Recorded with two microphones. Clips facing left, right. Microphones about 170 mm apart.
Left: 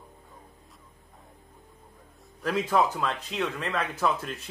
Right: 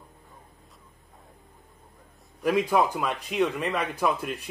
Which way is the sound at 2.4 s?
15° right (ahead or behind).